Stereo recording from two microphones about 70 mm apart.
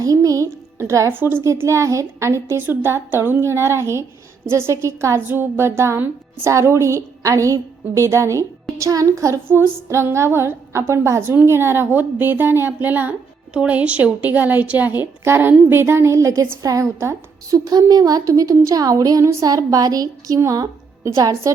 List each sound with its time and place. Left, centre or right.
0.0 s music: right
0.4 s speech: right
1.1 s a woman's voice: right
1.5 s a woman's voice: right
9.5 s a woman's voice: right
15.2 s a woman's voice: right
17.7 s a woman's voice: right
20.4 s music: right
21.2 s a woman's voice: right